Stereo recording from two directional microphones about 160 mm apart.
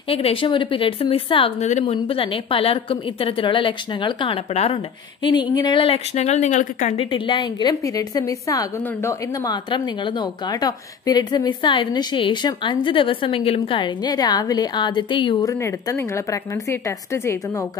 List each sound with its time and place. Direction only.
0.1 s a woman's voice: 35° left (ahead or behind); by 7.0 s 50° left (ahead or behind)
7.0 s a woman's voice: 30° left (ahead or behind)